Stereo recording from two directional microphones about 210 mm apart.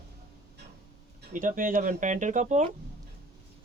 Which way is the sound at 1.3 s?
40° right (ahead or behind).